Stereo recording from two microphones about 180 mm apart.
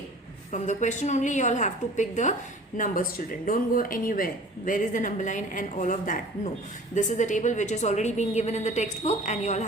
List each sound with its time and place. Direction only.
0.5 s a woman's voice: 40° left (ahead or behind)